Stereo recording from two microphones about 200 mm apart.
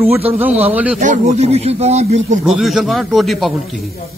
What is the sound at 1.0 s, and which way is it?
Speech, 35° right (ahead or behind).